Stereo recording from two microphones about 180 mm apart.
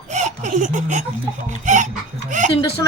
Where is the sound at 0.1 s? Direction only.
40° right (ahead or behind).